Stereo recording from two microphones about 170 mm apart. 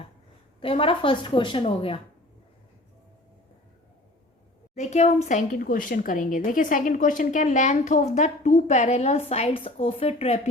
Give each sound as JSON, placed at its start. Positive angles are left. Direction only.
{"t": 0.6, "sound": "a woman's voice", "side_deg": 30}
{"t": 4.7, "sound": "speech", "side_deg": 40}